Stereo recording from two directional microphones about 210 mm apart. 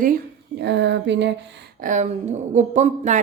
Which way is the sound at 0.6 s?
55° right (ahead or behind).